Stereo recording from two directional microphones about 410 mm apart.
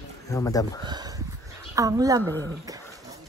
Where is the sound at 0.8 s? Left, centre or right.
Centre.